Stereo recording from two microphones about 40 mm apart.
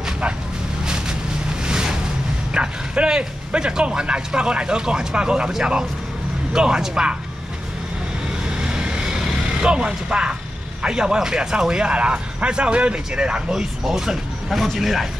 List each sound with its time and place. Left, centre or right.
0.8 s boat: centre
2.5 s speech: right
6.5 s speech: centre
8.5 s vehicle: right
10.8 s speech: centre
13.5 s speech: centre
14.5 s speech: centre